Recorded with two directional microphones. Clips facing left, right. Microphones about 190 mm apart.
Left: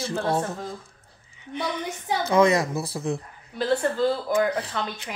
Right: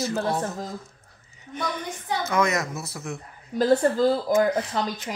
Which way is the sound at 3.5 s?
40° right (ahead or behind).